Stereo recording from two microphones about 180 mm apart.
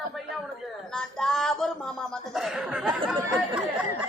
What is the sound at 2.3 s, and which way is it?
Chuckle, centre (ahead or behind).